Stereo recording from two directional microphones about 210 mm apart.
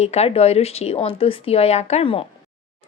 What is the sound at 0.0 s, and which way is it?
Speech, 30° left (ahead or behind).